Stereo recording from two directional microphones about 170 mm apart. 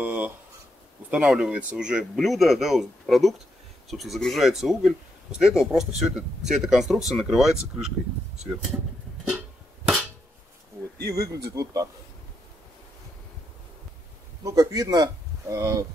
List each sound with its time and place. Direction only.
0.0 s a sound: 10° right (ahead or behind)
1.1 s speech: 5° right (ahead or behind)
11.1 s speech: 20° right (ahead or behind)
14.4 s speech: 20° right (ahead or behind)